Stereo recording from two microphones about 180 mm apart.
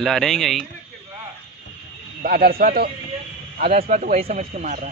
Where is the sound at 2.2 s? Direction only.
55° right (ahead or behind).